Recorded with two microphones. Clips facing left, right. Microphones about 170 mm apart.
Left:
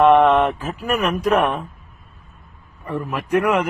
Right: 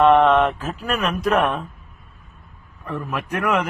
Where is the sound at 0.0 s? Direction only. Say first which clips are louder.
Left 1 dB; 10° left (ahead or behind).